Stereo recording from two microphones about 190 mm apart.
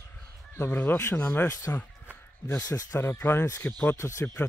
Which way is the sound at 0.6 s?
10° left (ahead or behind).